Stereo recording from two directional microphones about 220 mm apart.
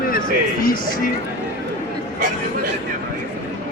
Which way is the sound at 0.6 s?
40° left (ahead or behind).